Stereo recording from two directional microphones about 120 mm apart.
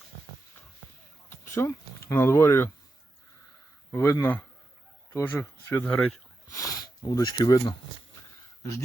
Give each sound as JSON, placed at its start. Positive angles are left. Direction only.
{"t": 1.3, "sound": "a sound", "side_deg": 20}
{"t": 2.1, "sound": "speech", "side_deg": 20}
{"t": 3.9, "sound": "speech", "side_deg": 20}
{"t": 6.5, "sound": "speech", "side_deg": 30}